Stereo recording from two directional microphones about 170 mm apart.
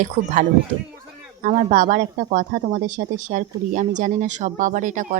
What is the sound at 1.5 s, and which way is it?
Speech, 50° right (ahead or behind).